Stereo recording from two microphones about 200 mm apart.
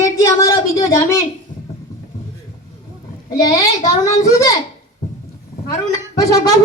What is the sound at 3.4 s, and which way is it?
A woman's voice, 20° left (ahead or behind).